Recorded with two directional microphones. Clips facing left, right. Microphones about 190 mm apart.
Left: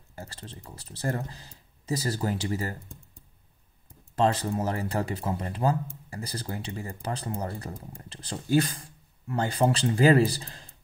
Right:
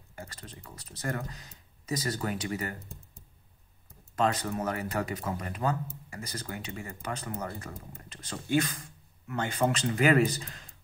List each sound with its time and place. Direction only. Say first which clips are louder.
0.1 s speech: left 2 dB; 30° left (ahead or behind)
4.1 s speech: left 3 dB; 30° left (ahead or behind)